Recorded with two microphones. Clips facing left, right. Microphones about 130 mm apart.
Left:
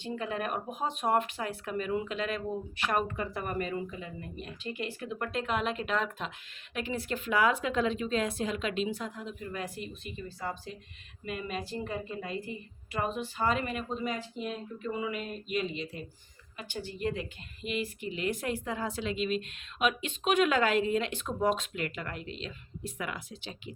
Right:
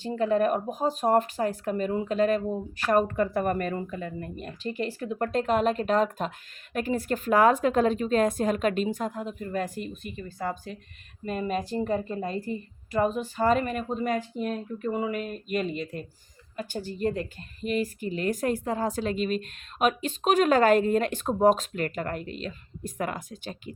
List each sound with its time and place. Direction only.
0.0 s speech: 40° right (ahead or behind)